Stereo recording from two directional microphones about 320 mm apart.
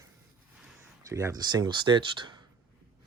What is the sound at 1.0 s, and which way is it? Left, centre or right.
Speech, centre.